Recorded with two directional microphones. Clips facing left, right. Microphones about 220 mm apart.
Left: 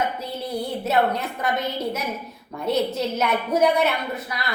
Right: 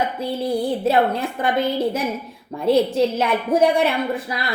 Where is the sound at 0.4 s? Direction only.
30° right (ahead or behind).